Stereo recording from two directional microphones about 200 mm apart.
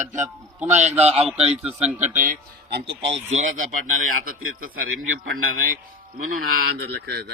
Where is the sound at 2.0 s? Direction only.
40° right (ahead or behind).